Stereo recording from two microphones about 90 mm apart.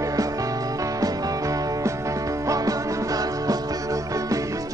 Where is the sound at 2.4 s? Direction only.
40° right (ahead or behind).